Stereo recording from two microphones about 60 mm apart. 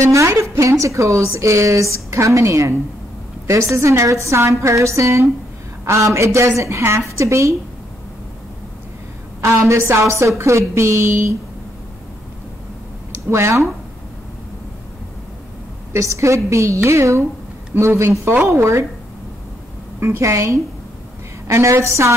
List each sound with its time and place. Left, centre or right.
0.0 s a woman's voice: right
3.7 s a woman's voice: right
9.4 s a woman's voice: right
13.3 s a woman's voice: right
15.9 s a woman's voice: right
20.0 s a woman's voice: right